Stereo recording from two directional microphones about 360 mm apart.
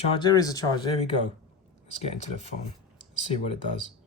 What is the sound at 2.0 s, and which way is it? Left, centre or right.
Speech, centre.